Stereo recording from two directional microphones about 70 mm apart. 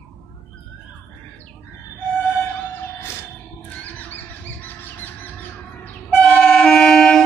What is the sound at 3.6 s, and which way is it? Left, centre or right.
Squawk, left.